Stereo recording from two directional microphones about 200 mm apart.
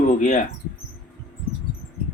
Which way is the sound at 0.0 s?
40° left (ahead or behind).